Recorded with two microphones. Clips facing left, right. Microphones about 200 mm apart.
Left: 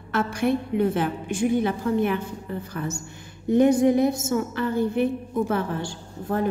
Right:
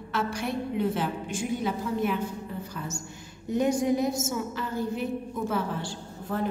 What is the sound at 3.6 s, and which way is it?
A woman's voice, 60° left (ahead or behind).